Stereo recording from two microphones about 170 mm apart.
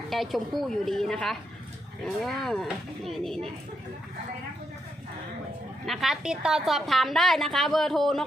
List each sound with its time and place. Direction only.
0.1 s a woman's voice: centre (ahead or behind)
5.8 s a woman's voice: centre (ahead or behind)